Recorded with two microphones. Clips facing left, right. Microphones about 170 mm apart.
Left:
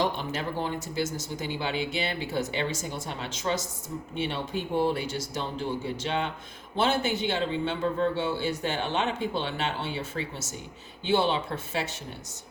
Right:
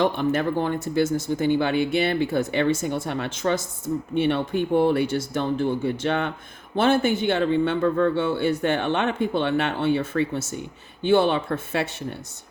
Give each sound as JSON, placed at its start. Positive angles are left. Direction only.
{"t": 0.0, "sound": "a man's voice", "side_deg": -55}